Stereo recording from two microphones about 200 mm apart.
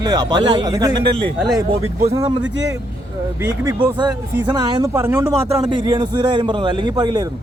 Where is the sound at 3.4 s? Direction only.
20° right (ahead or behind).